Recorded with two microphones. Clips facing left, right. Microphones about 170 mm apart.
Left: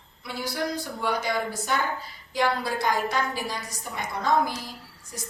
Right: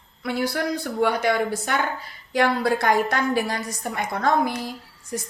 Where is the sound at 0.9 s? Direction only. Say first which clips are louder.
Right 7 dB; 65° right (ahead or behind).